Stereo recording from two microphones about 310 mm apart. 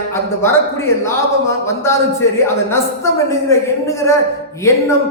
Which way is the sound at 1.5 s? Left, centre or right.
Centre.